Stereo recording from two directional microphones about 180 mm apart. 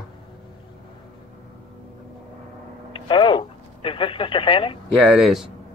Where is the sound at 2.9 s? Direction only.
25° left (ahead or behind).